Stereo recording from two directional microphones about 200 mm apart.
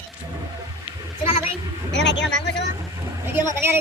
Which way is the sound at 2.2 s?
65° left (ahead or behind).